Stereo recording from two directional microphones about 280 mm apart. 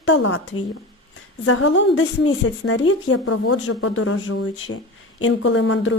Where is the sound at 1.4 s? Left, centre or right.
Left.